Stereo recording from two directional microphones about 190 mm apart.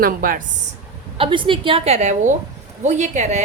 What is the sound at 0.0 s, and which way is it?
Speech, 45° right (ahead or behind).